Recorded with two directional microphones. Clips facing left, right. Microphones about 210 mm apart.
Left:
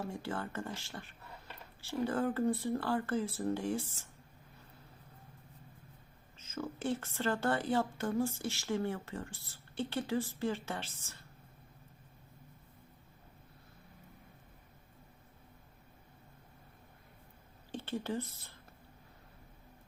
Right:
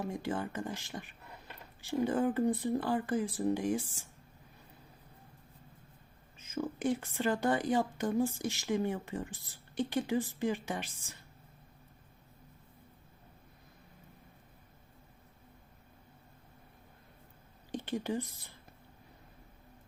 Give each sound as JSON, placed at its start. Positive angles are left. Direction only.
{"t": 0.0, "sound": "a woman's voice", "side_deg": -15}
{"t": 6.3, "sound": "a woman's voice", "side_deg": -15}
{"t": 17.7, "sound": "speech", "side_deg": -15}